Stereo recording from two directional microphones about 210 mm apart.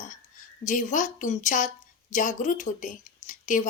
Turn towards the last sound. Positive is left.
turn(degrees=35)  # may be behind; listen again after turning